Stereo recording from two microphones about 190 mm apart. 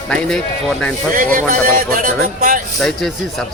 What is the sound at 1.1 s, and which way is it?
A man's voice, 50° right (ahead or behind).